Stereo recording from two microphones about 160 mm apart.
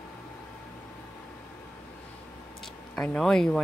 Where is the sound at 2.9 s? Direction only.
5° left (ahead or behind).